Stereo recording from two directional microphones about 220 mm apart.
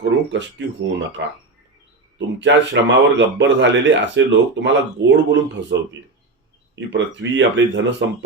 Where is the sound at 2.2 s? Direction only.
55° right (ahead or behind).